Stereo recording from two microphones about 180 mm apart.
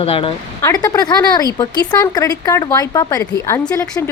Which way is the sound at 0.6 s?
20° left (ahead or behind).